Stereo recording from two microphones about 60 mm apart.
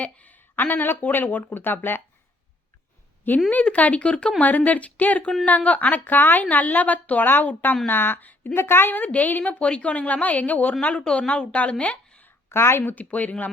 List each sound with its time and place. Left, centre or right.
0.0 s speech: left
3.5 s a woman's voice: left
12.5 s a woman's voice: left